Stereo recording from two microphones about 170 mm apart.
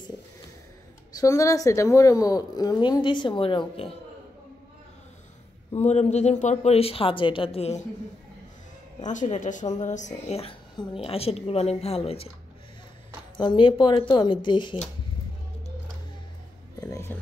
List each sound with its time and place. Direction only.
1.1 s a woman's voice: 20° left (ahead or behind)
5.7 s speech: 40° left (ahead or behind)
9.0 s a woman's voice: 45° left (ahead or behind)
13.4 s a woman's voice: 30° left (ahead or behind)
16.8 s a sound: 15° left (ahead or behind)